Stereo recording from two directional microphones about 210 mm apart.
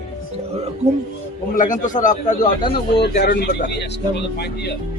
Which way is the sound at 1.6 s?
40° left (ahead or behind).